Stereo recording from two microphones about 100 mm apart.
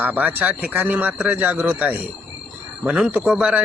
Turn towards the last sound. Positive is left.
turn(degrees=-10)  # may be behind; listen again after turning